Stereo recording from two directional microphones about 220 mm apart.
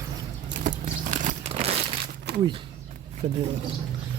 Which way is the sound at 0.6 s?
35° right (ahead or behind).